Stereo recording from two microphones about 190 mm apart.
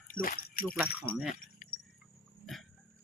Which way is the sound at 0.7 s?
5° right (ahead or behind).